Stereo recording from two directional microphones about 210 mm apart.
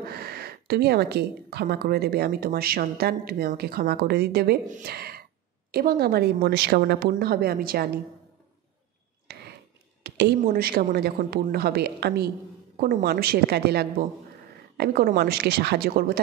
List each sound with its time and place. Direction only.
0.0 s speech: 50° right (ahead or behind)
9.3 s a sound: 50° right (ahead or behind)
10.0 s speech: 50° right (ahead or behind)